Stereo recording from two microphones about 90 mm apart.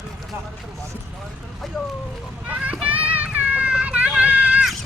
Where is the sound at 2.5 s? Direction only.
15° right (ahead or behind).